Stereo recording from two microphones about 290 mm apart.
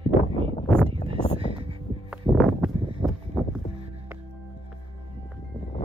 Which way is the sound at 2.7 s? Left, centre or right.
Centre.